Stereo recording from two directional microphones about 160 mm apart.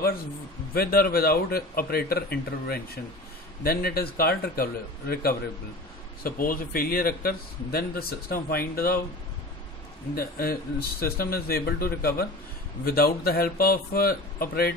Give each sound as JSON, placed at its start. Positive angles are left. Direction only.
{"t": 0.7, "sound": "a man's voice", "side_deg": 70}
{"t": 6.2, "sound": "a man's voice", "side_deg": 60}
{"t": 10.1, "sound": "a man's voice", "side_deg": 70}